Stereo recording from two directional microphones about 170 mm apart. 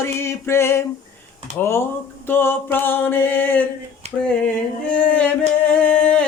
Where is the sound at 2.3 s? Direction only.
10° left (ahead or behind).